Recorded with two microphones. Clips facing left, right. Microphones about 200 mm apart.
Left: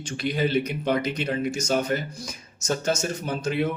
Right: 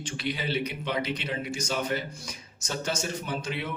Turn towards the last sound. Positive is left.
turn(degrees=45)  # may be behind; listen again after turning